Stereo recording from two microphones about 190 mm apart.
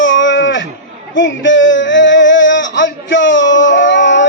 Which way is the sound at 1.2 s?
75° left (ahead or behind).